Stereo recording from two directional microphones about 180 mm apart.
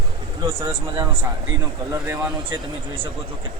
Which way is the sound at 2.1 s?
15° right (ahead or behind).